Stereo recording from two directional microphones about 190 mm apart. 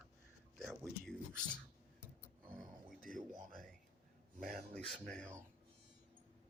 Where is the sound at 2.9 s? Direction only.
45° right (ahead or behind).